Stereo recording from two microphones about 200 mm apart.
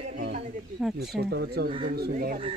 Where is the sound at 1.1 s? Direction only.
55° right (ahead or behind).